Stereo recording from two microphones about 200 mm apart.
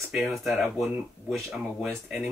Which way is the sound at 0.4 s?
Centre (ahead or behind).